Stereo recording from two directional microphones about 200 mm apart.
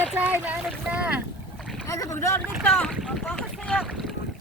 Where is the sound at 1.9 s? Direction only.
15° left (ahead or behind).